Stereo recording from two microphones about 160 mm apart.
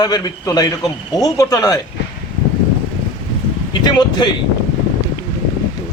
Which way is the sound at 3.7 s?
25° left (ahead or behind).